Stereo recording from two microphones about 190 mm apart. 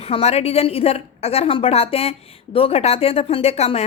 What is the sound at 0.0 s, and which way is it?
A woman's voice, 30° left (ahead or behind).